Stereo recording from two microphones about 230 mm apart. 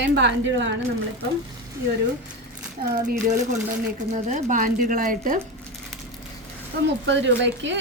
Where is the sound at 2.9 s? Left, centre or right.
Right.